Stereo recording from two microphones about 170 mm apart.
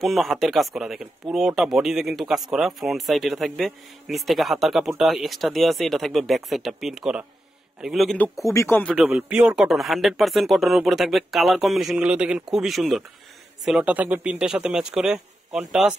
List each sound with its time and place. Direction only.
0.0 s speech: centre (ahead or behind)
8.5 s speech: 15° left (ahead or behind)
8.9 s a man's voice: 10° right (ahead or behind)